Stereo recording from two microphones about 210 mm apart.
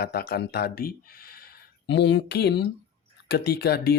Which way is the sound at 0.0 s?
50° left (ahead or behind).